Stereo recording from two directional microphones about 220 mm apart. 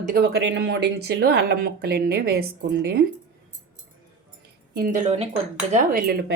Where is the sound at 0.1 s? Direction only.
50° right (ahead or behind).